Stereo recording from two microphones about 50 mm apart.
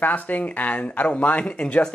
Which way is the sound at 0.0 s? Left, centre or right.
Left.